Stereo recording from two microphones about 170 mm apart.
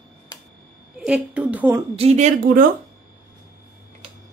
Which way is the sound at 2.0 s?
40° right (ahead or behind).